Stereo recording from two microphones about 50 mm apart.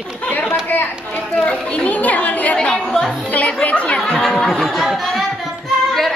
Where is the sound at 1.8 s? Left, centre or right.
Left.